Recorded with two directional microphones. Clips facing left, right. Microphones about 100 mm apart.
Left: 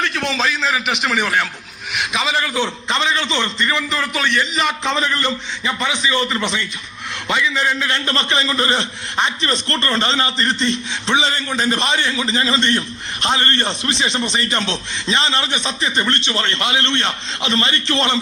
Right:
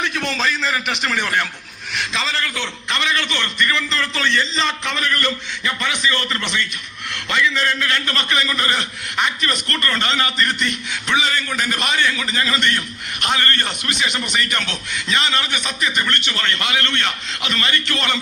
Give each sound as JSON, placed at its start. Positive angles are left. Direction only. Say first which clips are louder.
{"t": 0.0, "sound": "a man's voice", "louder": "left 2 dB", "side_deg": 0}
{"t": 4.9, "sound": "a man's voice", "louder": "left 3 dB", "side_deg": 20}